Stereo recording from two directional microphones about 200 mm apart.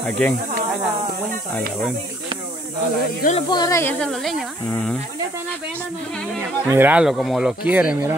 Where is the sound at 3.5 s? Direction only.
15° left (ahead or behind).